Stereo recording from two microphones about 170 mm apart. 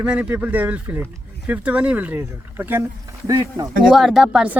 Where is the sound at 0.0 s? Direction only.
5° right (ahead or behind).